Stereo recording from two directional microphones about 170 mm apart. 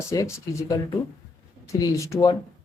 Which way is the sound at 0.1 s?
15° left (ahead or behind).